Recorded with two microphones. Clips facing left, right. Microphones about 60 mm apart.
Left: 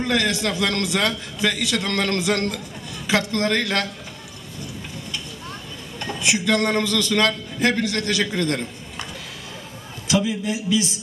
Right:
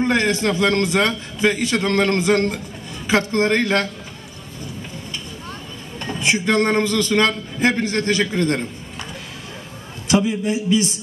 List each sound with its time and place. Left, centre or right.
0.0 s a man's voice: right
5.9 s a man's voice: right
10.0 s a man's voice: right